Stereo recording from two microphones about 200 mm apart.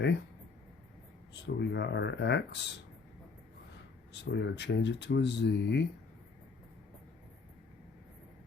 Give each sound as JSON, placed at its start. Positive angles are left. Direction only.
{"t": 1.3, "sound": "speech", "side_deg": 60}
{"t": 4.1, "sound": "speech", "side_deg": 60}